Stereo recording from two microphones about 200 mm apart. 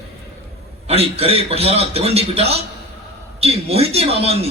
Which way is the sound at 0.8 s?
30° right (ahead or behind).